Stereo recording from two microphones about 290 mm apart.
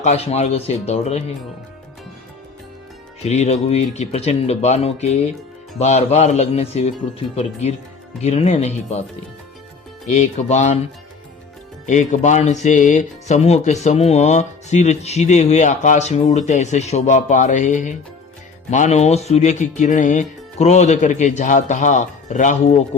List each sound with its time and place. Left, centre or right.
0.0 s speech: left
3.2 s speech: left
8.2 s speech: left
10.1 s speech: left
11.9 s speech: left